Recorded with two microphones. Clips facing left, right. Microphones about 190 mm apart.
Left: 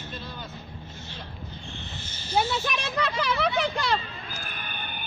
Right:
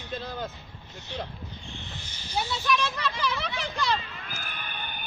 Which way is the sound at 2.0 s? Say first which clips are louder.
Left 5 dB; 15° right (ahead or behind).